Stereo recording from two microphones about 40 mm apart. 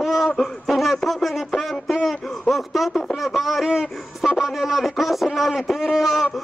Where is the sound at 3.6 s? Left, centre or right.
Centre.